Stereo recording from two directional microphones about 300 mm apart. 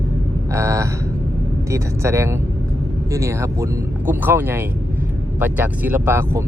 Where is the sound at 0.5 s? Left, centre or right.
Centre.